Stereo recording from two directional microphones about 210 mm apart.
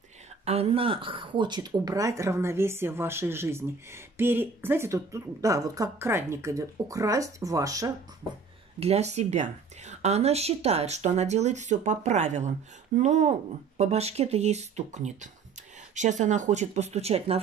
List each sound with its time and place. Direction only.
0.5 s speech: 30° right (ahead or behind)
8.7 s speech: 30° right (ahead or behind)